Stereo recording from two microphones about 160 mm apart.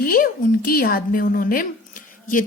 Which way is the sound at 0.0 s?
60° left (ahead or behind).